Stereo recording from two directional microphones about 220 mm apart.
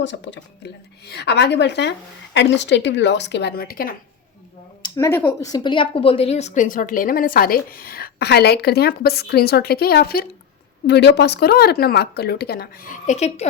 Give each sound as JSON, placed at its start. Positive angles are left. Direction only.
{"t": 0.0, "sound": "speech", "side_deg": 55}
{"t": 4.8, "sound": "speech", "side_deg": 10}